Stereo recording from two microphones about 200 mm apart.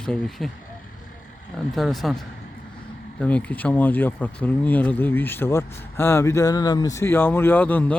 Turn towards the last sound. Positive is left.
turn(degrees=10)  # may be behind; listen again after turning